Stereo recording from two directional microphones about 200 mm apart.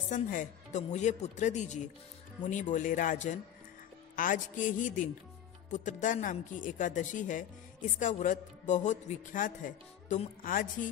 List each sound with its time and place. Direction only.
0.1 s speech: 40° left (ahead or behind)